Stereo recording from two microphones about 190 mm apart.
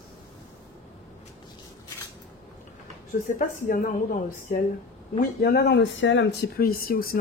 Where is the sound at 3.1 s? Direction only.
45° left (ahead or behind).